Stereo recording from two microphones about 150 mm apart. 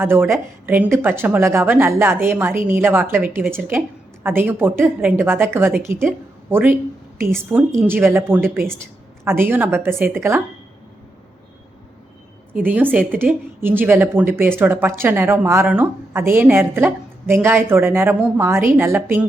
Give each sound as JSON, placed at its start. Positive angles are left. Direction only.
{"t": 0.0, "sound": "a woman's voice", "side_deg": -15}
{"t": 12.6, "sound": "a woman's voice", "side_deg": -10}